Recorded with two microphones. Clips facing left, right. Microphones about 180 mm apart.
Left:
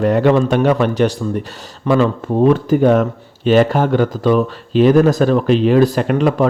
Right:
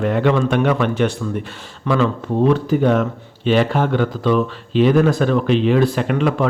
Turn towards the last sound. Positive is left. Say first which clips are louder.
# left 3 dB
turn(degrees=40)  # may be behind; listen again after turning